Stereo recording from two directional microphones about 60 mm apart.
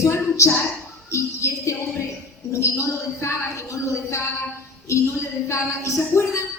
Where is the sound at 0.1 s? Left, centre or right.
Left.